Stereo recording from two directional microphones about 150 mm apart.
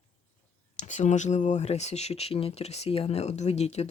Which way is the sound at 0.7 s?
55° left (ahead or behind).